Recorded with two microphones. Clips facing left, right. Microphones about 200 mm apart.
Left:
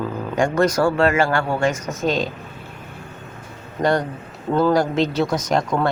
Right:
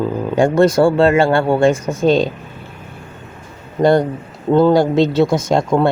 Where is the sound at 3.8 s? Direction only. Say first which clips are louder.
Right 7 dB; 30° right (ahead or behind).